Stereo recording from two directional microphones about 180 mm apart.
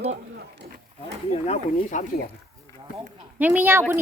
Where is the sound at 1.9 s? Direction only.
45° left (ahead or behind).